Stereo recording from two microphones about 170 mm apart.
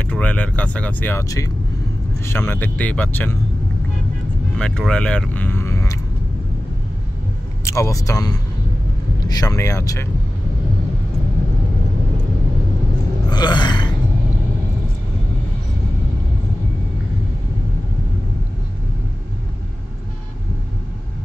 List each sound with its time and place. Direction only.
0.0 s speech: 10° left (ahead or behind)
4.6 s speech: 5° left (ahead or behind)
7.6 s speech: 15° left (ahead or behind)
13.3 s a sound: 25° left (ahead or behind)